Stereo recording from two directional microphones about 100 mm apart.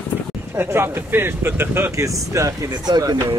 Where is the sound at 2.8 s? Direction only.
45° right (ahead or behind).